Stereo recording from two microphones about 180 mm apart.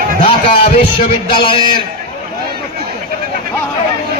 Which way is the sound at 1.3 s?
30° left (ahead or behind).